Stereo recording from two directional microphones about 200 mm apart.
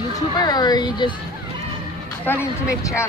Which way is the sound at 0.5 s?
20° left (ahead or behind).